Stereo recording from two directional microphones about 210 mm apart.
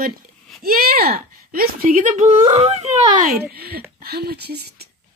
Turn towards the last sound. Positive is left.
turn(degrees=-50)  # may be behind; listen again after turning